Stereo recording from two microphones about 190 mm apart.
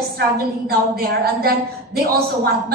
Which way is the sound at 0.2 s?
55° right (ahead or behind).